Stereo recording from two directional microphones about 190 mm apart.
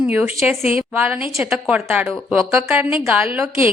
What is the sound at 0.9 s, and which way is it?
A woman's voice, 10° right (ahead or behind).